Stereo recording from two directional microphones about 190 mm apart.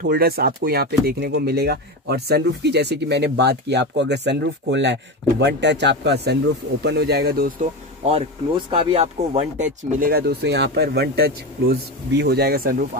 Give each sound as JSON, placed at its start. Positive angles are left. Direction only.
{"t": 0.0, "sound": "speech", "side_deg": -50}
{"t": 8.6, "sound": "speech", "side_deg": -30}